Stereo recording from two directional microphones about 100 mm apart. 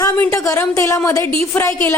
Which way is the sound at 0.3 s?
30° left (ahead or behind).